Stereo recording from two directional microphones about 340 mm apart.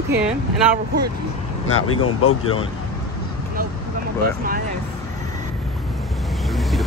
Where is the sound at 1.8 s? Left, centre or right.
Left.